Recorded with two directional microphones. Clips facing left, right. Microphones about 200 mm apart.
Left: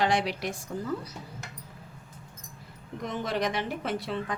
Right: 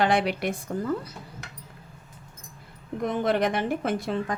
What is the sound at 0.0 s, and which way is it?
Speech, 55° right (ahead or behind).